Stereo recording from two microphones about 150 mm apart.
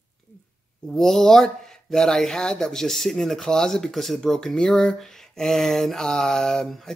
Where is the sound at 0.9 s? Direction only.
Centre (ahead or behind).